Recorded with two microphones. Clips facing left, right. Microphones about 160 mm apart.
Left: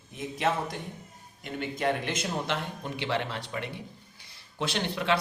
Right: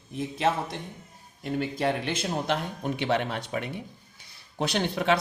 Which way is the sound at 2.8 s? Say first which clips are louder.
Right 5 dB; 55° right (ahead or behind).